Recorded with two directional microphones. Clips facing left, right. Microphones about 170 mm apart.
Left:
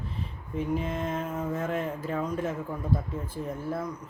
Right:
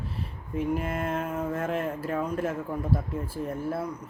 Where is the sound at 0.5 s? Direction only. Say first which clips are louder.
Right 1 dB; 5° right (ahead or behind).